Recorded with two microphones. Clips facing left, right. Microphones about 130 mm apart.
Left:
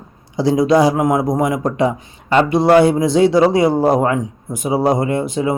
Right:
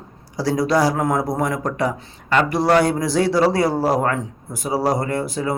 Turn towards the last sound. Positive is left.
turn(degrees=20)  # may be behind; listen again after turning